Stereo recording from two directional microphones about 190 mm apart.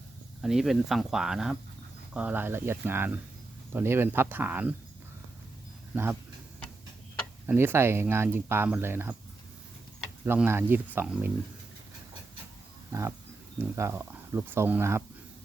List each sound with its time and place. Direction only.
0.4 s speech: centre (ahead or behind)
5.9 s speech: 10° right (ahead or behind)
7.4 s speech: 10° right (ahead or behind)
10.2 s speech: 10° right (ahead or behind)
12.9 s speech: 15° right (ahead or behind)